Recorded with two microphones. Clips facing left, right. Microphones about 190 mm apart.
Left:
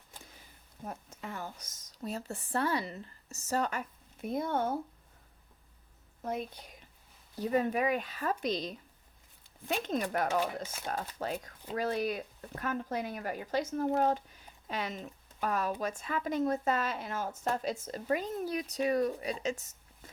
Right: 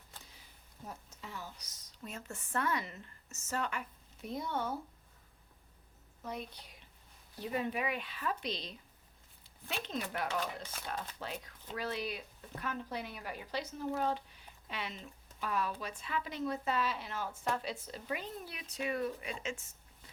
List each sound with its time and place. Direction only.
0.9 s a woman's voice: 55° left (ahead or behind)
6.2 s a woman's voice: 50° left (ahead or behind)